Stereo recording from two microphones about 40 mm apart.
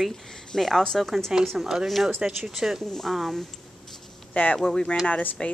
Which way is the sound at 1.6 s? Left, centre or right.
Centre.